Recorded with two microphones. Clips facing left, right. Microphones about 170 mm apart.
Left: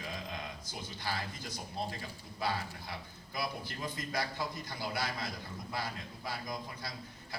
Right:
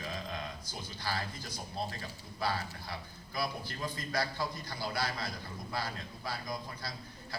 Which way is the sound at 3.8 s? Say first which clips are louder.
Right 2 dB; 20° left (ahead or behind).